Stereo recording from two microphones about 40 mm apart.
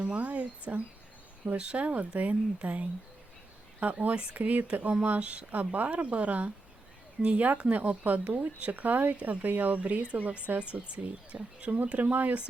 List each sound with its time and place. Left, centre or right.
0.0 s speech: right
10.0 s speech: right